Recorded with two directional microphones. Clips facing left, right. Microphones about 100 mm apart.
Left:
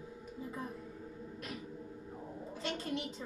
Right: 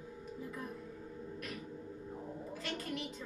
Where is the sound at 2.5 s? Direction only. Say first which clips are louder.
Left 4 dB; 25° left (ahead or behind).